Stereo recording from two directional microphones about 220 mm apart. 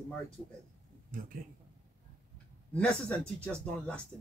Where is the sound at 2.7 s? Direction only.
5° left (ahead or behind).